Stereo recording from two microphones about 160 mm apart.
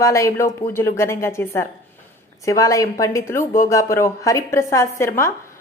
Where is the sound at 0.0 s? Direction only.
20° left (ahead or behind).